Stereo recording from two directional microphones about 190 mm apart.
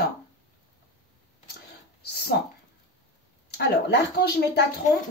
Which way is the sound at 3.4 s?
60° left (ahead or behind).